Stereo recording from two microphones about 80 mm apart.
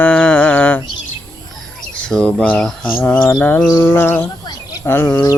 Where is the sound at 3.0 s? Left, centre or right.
Centre.